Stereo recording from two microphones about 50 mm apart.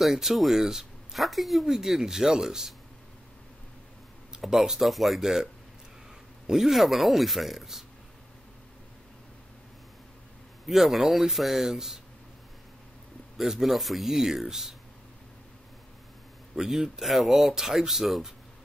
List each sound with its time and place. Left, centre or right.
0.0 s speech: centre
4.4 s speech: centre
10.7 s speech: centre
13.4 s speech: centre
16.5 s speech: centre